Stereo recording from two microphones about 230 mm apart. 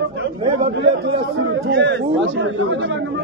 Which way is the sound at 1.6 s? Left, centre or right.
Right.